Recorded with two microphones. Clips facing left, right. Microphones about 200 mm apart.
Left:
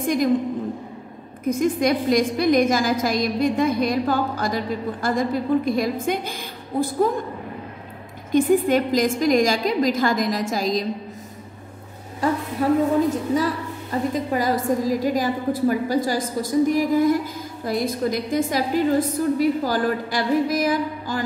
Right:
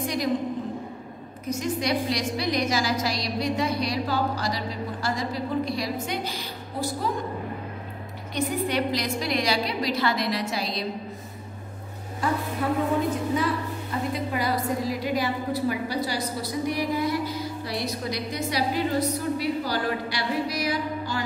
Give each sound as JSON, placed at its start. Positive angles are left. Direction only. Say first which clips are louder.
{"t": 0.0, "sound": "a woman's voice", "louder": "left 7 dB", "side_deg": 50}
{"t": 1.4, "sound": "a woman's voice", "louder": "left 8 dB", "side_deg": 55}
{"t": 8.3, "sound": "a woman's voice", "louder": "left 10 dB", "side_deg": 50}
{"t": 12.6, "sound": "a woman's voice", "louder": "left 8 dB", "side_deg": 40}
{"t": 14.1, "sound": "a woman's voice", "louder": "left 4 dB", "side_deg": 45}